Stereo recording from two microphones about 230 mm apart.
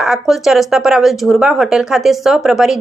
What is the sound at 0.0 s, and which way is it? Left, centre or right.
Speech, centre.